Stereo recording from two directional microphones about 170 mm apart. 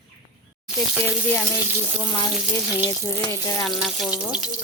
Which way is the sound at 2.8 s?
20° left (ahead or behind).